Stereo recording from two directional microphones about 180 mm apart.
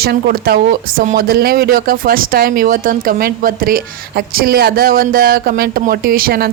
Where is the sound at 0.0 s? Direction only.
60° right (ahead or behind).